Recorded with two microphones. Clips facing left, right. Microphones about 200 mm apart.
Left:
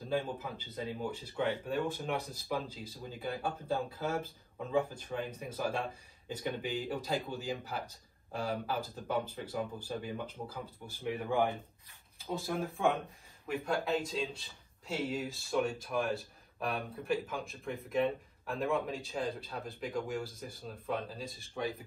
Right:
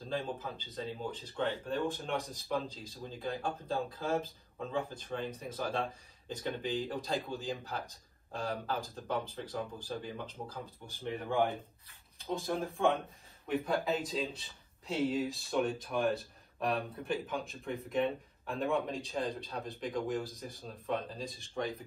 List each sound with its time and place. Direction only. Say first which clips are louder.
0.1 s speech: left 2 dB; 10° left (ahead or behind)